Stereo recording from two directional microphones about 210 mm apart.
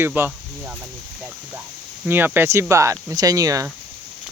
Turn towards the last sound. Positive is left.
turn(degrees=-15)  # may be behind; listen again after turning